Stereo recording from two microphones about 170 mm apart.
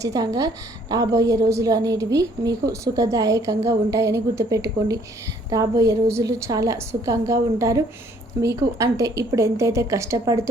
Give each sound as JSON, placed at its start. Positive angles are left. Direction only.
{"t": 0.0, "sound": "a woman's voice", "side_deg": -20}